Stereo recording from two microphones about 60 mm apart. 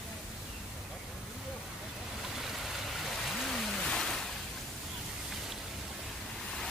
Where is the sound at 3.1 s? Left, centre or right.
Centre.